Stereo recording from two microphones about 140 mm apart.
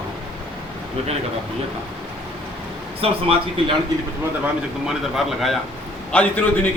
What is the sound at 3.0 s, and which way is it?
Speech, 45° right (ahead or behind).